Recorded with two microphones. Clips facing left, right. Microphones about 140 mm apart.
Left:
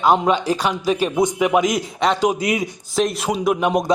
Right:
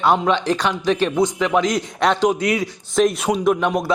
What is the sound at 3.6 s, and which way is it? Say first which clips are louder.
Speech: left 2 dB; 20° left (ahead or behind).